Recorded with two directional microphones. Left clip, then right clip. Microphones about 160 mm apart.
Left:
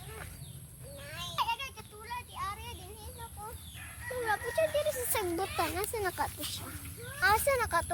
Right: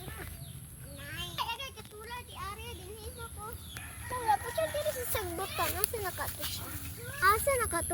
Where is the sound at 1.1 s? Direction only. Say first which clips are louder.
Left 3 dB; 15° left (ahead or behind).